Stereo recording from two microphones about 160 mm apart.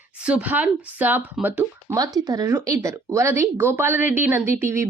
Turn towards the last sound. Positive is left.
turn(degrees=-15)  # may be behind; listen again after turning